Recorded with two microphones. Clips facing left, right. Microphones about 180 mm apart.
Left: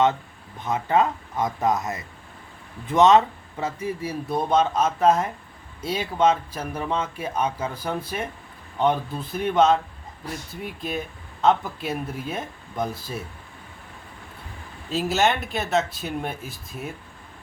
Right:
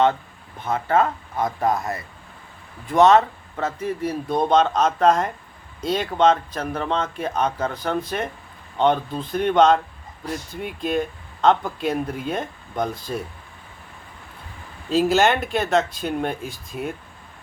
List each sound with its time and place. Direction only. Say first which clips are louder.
0.6 s speech: right 1 dB; 15° left (ahead or behind)
9.3 s speech: right 3 dB; 5° left (ahead or behind)
14.8 s speech: right 5 dB; centre (ahead or behind)